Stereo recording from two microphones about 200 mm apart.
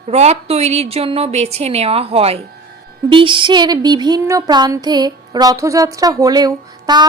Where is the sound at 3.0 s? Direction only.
25° right (ahead or behind).